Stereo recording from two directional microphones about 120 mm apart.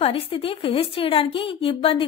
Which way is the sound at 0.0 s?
50° left (ahead or behind).